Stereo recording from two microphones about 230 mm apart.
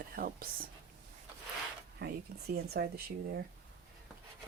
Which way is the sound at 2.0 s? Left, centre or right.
Right.